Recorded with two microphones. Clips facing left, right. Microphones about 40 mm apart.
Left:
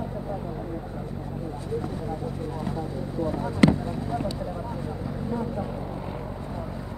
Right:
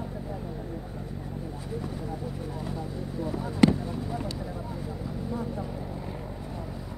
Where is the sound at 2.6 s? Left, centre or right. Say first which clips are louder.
Left 4 dB; centre.